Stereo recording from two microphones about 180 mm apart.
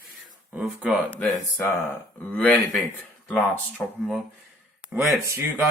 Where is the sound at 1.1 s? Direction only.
10° left (ahead or behind).